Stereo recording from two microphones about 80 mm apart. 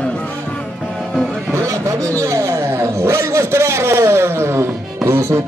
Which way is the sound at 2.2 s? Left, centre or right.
Right.